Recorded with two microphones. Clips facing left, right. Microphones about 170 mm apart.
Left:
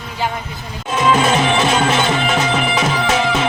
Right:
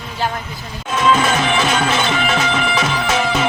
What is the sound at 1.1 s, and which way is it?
Music, 20° left (ahead or behind).